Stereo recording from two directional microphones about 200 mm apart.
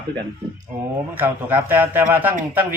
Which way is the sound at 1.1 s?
10° right (ahead or behind).